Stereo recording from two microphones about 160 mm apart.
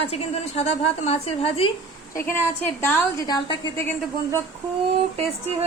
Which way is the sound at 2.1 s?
15° left (ahead or behind).